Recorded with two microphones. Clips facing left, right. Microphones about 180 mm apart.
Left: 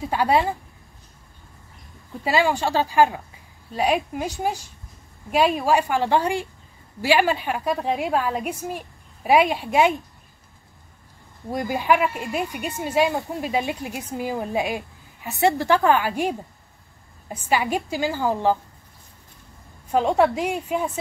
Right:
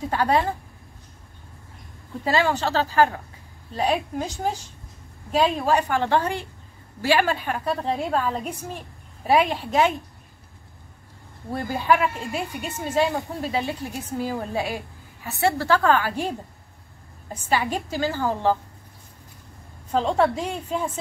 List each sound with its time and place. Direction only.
0.1 s speech: 10° left (ahead or behind)
2.2 s speech: 10° left (ahead or behind)
11.5 s speech: 15° left (ahead or behind)
19.9 s speech: 10° left (ahead or behind)